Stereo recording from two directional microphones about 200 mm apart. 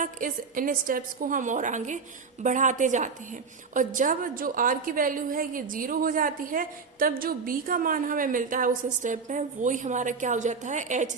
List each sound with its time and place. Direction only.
0.0 s a woman's voice: 40° right (ahead or behind)